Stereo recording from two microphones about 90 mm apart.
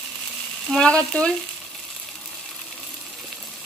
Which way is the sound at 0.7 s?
10° left (ahead or behind).